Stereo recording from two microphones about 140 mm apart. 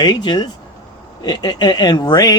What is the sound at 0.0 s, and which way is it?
Speech, 30° left (ahead or behind).